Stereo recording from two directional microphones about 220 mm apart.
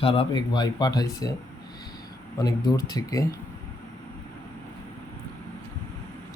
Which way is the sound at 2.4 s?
20° left (ahead or behind).